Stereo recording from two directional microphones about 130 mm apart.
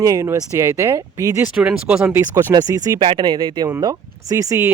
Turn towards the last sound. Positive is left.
turn(degrees=-25)  # may be behind; listen again after turning